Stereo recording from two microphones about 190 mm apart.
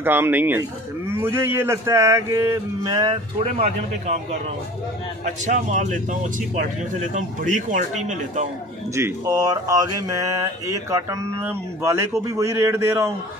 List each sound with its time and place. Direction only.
0.0 s mantra: 10° right (ahead or behind)
3.4 s speech: 35° right (ahead or behind)
8.9 s mantra: 15° right (ahead or behind)